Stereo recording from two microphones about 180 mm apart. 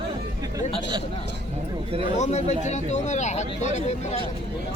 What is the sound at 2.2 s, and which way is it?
Speech, 40° left (ahead or behind).